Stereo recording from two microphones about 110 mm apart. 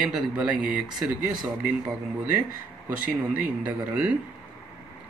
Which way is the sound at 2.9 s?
15° right (ahead or behind).